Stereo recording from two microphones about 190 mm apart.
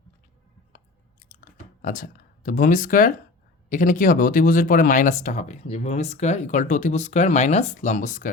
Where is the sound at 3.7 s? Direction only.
45° left (ahead or behind).